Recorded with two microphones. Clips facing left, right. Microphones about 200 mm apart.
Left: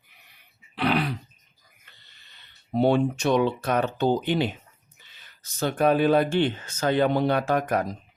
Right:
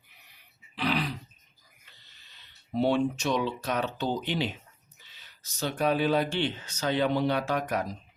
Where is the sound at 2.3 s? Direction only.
55° left (ahead or behind).